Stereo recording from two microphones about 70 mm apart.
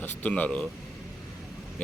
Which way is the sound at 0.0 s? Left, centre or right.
Left.